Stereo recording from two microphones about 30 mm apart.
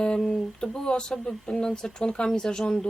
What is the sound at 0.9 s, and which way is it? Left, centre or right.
Speech, left.